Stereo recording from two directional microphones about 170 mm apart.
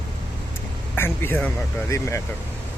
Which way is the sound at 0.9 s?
15° left (ahead or behind).